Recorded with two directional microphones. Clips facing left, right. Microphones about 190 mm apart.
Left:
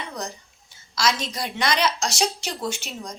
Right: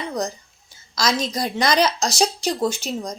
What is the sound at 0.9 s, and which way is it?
A woman's voice, 40° right (ahead or behind).